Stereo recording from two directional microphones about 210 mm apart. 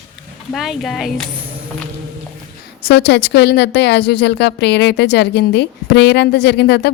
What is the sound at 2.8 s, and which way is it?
A woman's voice, 50° left (ahead or behind).